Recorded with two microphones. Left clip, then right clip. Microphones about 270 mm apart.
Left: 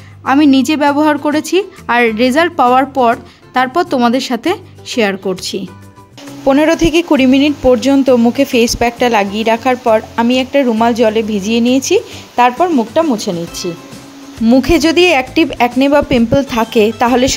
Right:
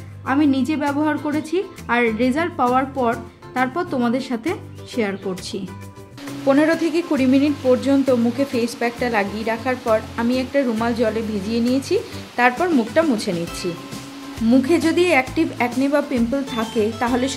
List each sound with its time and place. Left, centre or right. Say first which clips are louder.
0.2 s a woman's voice: left 9 dB; left; by 13.7 s centre
14.5 s a woman's voice: left 7 dB; left